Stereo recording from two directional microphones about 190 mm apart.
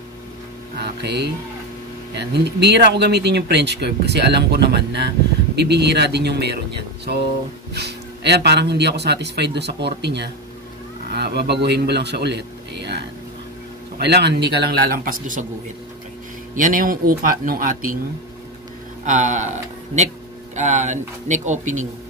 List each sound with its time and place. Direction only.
0.7 s speech: 60° right (ahead or behind)
7.7 s speech: 60° right (ahead or behind); by 15.4 s 45° right (ahead or behind)
16.5 s speech: 45° right (ahead or behind)
19.0 s speech: 40° right (ahead or behind)
20.5 s speech: 40° right (ahead or behind)